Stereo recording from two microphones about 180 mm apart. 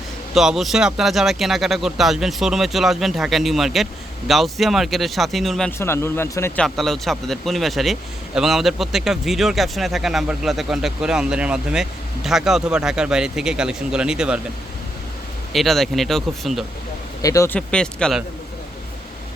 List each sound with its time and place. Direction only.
0.3 s speech: centre (ahead or behind)
5.8 s speech: 15° left (ahead or behind)
6.6 s speech: centre (ahead or behind)
15.5 s speech: centre (ahead or behind)
17.2 s speech: 15° left (ahead or behind)
17.7 s speech: 5° left (ahead or behind)